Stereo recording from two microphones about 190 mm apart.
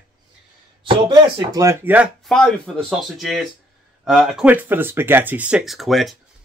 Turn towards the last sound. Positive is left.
turn(degrees=0)  # may be behind; listen again after turning